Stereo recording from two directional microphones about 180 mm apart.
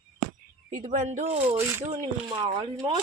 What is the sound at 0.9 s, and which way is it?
Speech, 40° right (ahead or behind).